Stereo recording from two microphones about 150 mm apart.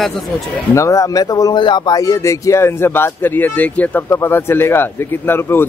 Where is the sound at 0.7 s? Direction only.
20° left (ahead or behind).